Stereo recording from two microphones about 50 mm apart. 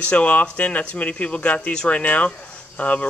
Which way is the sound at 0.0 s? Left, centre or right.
Left.